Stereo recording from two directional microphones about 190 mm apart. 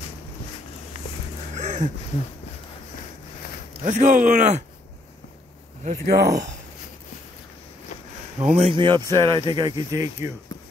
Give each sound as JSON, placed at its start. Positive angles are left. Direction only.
{"t": 1.5, "sound": "a sound", "side_deg": -40}
{"t": 3.8, "sound": "speech", "side_deg": -40}
{"t": 6.0, "sound": "speech", "side_deg": -55}
{"t": 8.4, "sound": "speech", "side_deg": -35}